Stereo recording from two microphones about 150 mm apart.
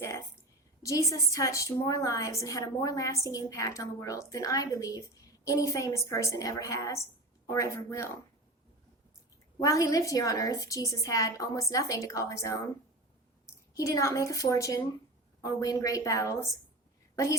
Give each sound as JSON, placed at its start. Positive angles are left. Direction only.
{"t": 0.8, "sound": "a woman's voice", "side_deg": 20}
{"t": 9.6, "sound": "a woman's voice", "side_deg": 20}
{"t": 13.7, "sound": "a woman's voice", "side_deg": 20}